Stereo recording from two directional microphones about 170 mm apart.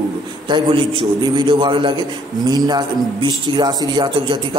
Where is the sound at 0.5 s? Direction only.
30° right (ahead or behind).